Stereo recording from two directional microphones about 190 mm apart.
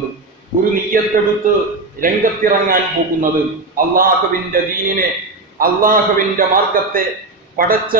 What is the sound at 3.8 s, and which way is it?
A man's voice, 50° right (ahead or behind).